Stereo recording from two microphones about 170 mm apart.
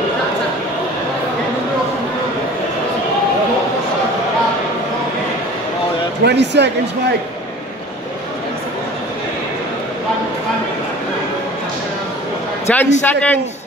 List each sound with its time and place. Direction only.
6.2 s speech: 90° right
12.7 s a man's voice: 10° left (ahead or behind)